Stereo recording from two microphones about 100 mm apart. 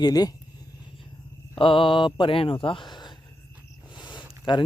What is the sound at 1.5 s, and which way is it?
Speech, 60° left (ahead or behind).